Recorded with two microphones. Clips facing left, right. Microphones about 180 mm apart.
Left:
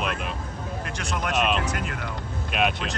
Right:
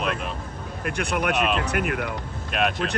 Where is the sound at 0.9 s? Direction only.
60° right (ahead or behind).